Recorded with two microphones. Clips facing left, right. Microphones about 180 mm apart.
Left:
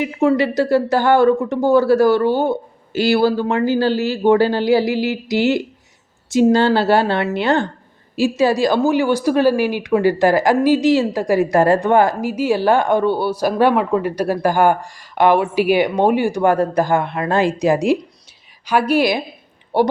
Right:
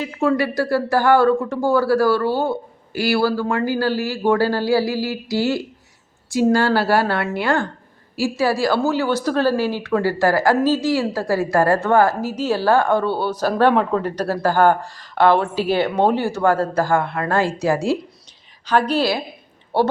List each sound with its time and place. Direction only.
0.0 s a woman's voice: 20° left (ahead or behind)